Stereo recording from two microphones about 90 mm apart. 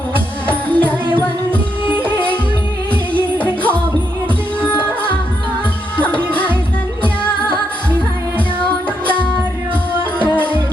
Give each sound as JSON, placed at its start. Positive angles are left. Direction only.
{"t": 0.4, "sound": "music", "side_deg": 15}
{"t": 1.1, "sound": "music", "side_deg": -20}
{"t": 3.3, "sound": "music", "side_deg": 15}
{"t": 6.1, "sound": "music", "side_deg": 15}